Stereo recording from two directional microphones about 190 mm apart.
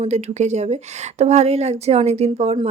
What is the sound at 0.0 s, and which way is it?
A woman's voice, 35° right (ahead or behind).